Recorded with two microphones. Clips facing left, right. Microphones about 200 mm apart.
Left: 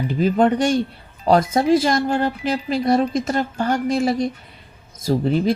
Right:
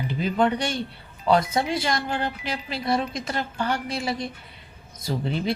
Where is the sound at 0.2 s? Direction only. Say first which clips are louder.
Left 6 dB; 40° left (ahead or behind).